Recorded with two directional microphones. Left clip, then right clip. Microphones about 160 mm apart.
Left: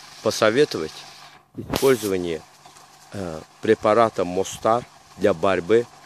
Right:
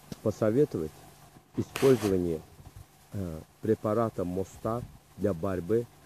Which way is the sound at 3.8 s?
25° left (ahead or behind).